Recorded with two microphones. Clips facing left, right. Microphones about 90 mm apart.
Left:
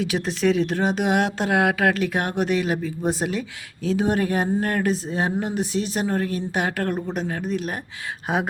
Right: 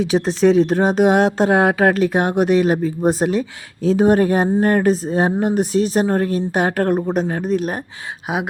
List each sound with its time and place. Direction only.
0.0 s speech: 30° right (ahead or behind)
8.3 s speech: 10° right (ahead or behind)